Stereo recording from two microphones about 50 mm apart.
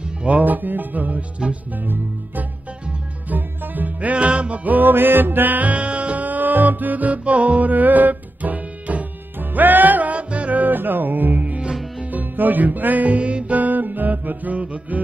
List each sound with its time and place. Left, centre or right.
0.2 s music: right